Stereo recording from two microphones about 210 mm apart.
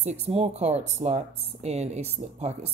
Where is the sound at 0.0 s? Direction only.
30° right (ahead or behind).